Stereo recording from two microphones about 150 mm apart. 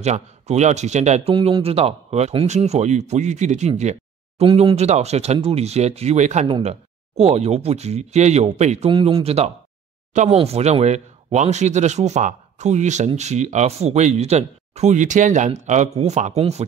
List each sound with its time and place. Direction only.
0.0 s speech: 50° right (ahead or behind)
1.3 s speech: 35° right (ahead or behind)
6.4 s speech: 40° right (ahead or behind)